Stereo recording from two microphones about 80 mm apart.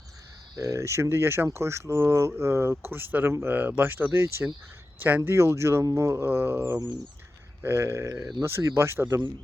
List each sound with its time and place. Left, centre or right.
0.6 s speech: right